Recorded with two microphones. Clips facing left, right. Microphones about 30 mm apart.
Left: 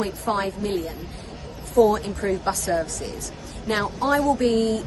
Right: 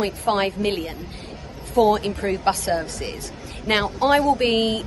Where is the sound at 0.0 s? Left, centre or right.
Right.